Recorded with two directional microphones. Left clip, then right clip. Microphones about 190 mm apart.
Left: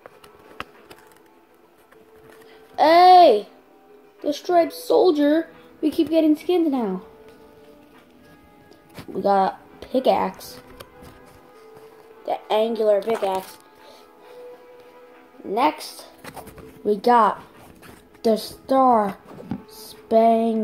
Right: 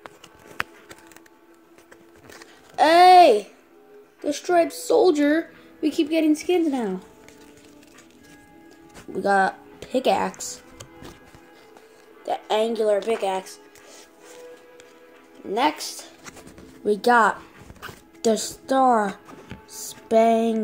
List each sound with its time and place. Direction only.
2.7 s a sound: 15° right (ahead or behind)
4.2 s a woman's voice: 15° right (ahead or behind)
9.1 s a woman's voice: 15° right (ahead or behind)
12.3 s speech: 15° right (ahead or behind)
15.5 s a woman's voice: 10° right (ahead or behind)
19.8 s a sound: 15° right (ahead or behind)